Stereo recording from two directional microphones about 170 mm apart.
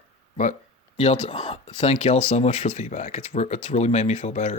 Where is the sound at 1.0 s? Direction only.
40° left (ahead or behind).